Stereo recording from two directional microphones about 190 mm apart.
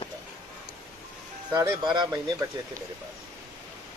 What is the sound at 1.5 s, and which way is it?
Speech, 25° right (ahead or behind).